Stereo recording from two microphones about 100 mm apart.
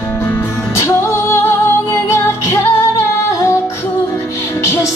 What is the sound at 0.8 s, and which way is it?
Music, 25° left (ahead or behind).